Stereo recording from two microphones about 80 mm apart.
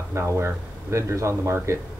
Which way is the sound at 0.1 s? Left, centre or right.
Right.